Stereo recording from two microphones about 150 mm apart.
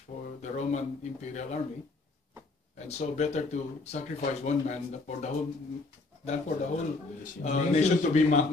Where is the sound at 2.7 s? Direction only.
45° left (ahead or behind).